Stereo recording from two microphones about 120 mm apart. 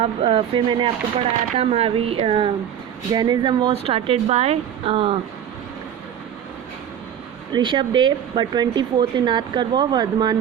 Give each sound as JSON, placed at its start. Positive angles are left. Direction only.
{"t": 0.0, "sound": "speech", "side_deg": -50}
{"t": 3.1, "sound": "a woman's voice", "side_deg": -35}
{"t": 3.7, "sound": "speech", "side_deg": -55}
{"t": 7.5, "sound": "a woman's voice", "side_deg": -45}